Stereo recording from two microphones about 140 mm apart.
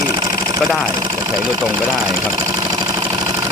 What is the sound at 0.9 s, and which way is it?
Speech, 30° right (ahead or behind).